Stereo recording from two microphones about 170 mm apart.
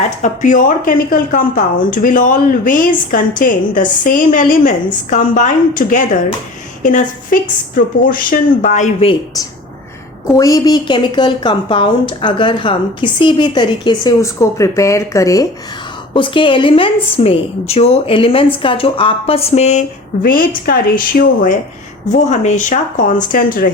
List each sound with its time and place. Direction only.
0.2 s speech: 50° left (ahead or behind)
10.2 s a woman's voice: 20° left (ahead or behind)
16.1 s a woman's voice: 30° left (ahead or behind)
20.7 s speech: 60° left (ahead or behind)
22.1 s speech: 45° left (ahead or behind)